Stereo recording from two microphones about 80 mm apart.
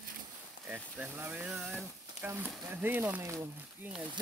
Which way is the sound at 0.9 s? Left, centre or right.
Right.